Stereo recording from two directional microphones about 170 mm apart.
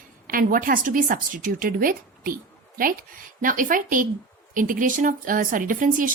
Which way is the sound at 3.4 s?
55° right (ahead or behind).